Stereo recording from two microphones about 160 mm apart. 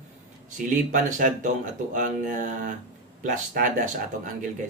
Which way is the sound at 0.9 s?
50° right (ahead or behind).